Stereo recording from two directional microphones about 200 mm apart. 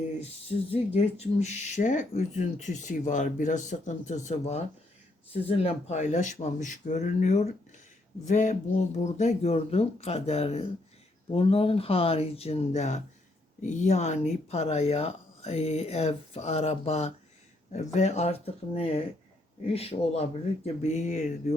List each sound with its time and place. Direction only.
0.7 s speech: 30° left (ahead or behind)